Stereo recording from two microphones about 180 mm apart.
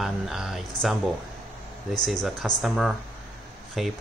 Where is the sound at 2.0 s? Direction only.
Centre (ahead or behind).